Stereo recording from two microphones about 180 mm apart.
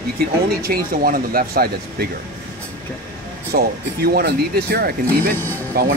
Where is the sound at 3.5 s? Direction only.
55° right (ahead or behind).